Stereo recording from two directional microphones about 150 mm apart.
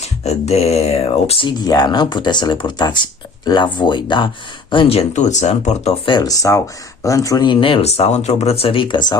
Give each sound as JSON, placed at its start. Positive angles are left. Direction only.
{"t": 0.0, "sound": "speech", "side_deg": 45}
{"t": 6.1, "sound": "speech", "side_deg": 25}